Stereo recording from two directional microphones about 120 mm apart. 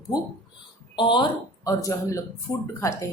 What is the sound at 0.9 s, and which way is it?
Speech, 40° left (ahead or behind).